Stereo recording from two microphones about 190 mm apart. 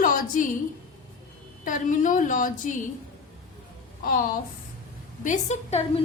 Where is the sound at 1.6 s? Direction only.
45° left (ahead or behind).